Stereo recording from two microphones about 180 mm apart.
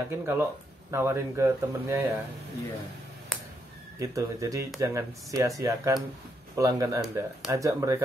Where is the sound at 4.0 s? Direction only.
20° right (ahead or behind).